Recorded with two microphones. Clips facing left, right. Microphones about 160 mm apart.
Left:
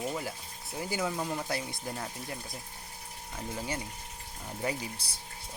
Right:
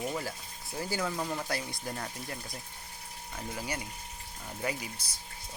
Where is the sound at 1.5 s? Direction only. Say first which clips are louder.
Left 1 dB; 25° left (ahead or behind).